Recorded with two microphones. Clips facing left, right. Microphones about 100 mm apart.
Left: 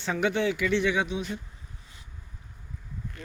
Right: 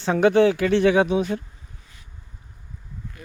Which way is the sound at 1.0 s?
55° right (ahead or behind).